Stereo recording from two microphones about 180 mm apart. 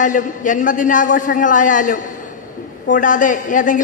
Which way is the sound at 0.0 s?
45° left (ahead or behind).